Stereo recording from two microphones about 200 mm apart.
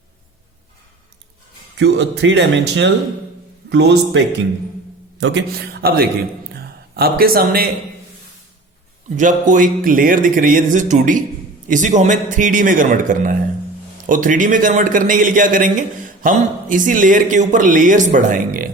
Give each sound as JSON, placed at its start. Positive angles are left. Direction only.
{"t": 1.8, "sound": "speech", "side_deg": -60}
{"t": 5.2, "sound": "a man's voice", "side_deg": -65}
{"t": 6.5, "sound": "a sound", "side_deg": -50}
{"t": 9.1, "sound": "speech", "side_deg": -40}